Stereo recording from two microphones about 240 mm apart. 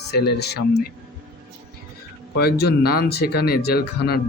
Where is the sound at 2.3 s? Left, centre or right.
Left.